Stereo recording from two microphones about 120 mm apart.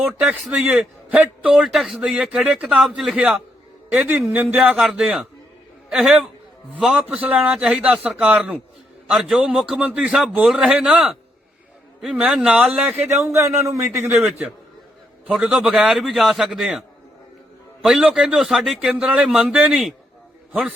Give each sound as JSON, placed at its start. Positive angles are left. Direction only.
{"t": 0.0, "sound": "a man's voice", "side_deg": -10}
{"t": 13.2, "sound": "a man's voice", "side_deg": -25}
{"t": 14.3, "sound": "a man's voice", "side_deg": -5}
{"t": 17.8, "sound": "a man's voice", "side_deg": -5}